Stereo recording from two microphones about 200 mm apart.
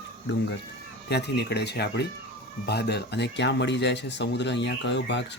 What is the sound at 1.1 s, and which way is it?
Speech, 55° left (ahead or behind).